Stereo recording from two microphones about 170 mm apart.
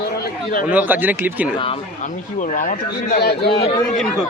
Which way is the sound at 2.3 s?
50° left (ahead or behind).